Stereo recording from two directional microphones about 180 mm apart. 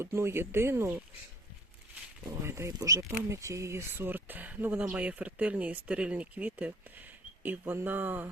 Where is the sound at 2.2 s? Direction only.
15° right (ahead or behind).